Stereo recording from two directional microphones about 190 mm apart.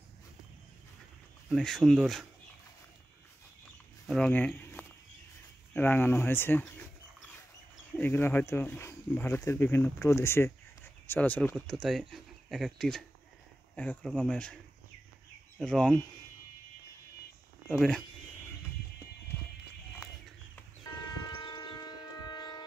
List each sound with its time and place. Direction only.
1.5 s speech: centre (ahead or behind)
4.1 s speech: 5° left (ahead or behind)
8.0 s speech: 10° left (ahead or behind)
15.6 s speech: 5° left (ahead or behind)
17.6 s speech: 5° left (ahead or behind)
21.4 s a sound: 25° left (ahead or behind)